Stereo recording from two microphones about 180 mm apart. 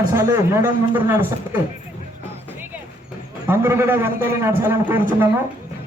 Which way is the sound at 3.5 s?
15° right (ahead or behind).